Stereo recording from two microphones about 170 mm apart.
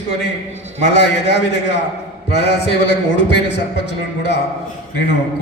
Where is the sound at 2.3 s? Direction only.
80° left.